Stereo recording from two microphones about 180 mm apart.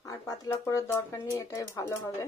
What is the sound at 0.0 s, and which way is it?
Speech, 20° left (ahead or behind).